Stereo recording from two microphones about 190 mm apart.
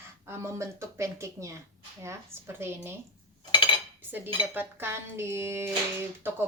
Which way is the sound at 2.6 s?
15° right (ahead or behind).